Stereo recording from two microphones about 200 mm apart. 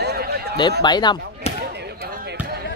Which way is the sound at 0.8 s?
20° left (ahead or behind).